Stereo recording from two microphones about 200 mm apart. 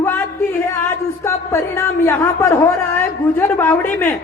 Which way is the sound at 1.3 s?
15° left (ahead or behind).